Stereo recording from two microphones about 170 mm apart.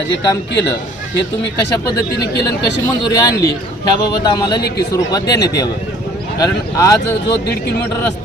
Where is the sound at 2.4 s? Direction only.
20° left (ahead or behind).